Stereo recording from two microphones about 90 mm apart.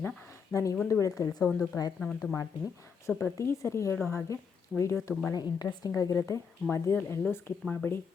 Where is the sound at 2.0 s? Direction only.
10° left (ahead or behind).